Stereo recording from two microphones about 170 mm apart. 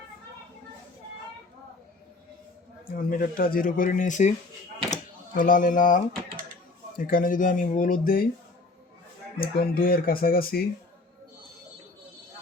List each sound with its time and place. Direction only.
2.8 s speech: 60° left (ahead or behind)
4.9 s a sound: 55° left (ahead or behind)
6.9 s speech: 55° left (ahead or behind)
9.6 s speech: 60° left (ahead or behind)